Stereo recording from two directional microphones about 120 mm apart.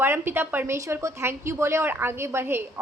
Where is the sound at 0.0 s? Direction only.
20° right (ahead or behind).